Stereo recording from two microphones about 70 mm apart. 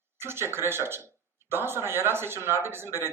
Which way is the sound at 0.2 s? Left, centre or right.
Right.